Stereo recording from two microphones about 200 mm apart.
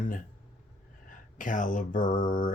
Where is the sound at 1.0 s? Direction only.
40° left (ahead or behind).